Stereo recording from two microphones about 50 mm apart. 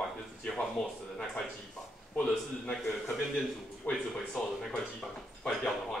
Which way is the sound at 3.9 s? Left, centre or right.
Left.